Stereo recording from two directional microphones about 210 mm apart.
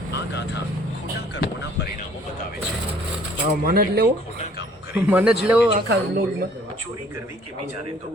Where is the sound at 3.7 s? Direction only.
45° right (ahead or behind).